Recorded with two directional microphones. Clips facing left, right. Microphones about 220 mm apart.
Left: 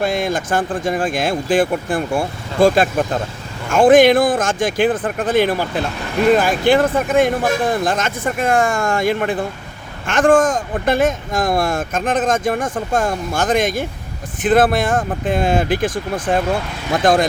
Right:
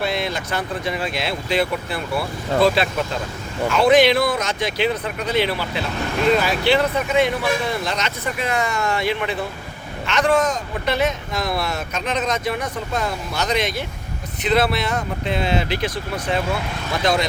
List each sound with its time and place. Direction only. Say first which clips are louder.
0.0 s speech: left 5 dB; 45° left (ahead or behind)